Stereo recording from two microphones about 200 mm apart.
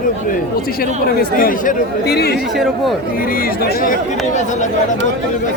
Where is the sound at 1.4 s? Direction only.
45° left (ahead or behind).